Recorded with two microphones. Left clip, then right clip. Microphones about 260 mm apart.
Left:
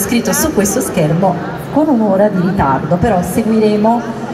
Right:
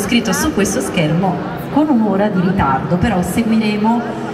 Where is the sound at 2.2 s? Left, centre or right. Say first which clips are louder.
Left 3 dB; left.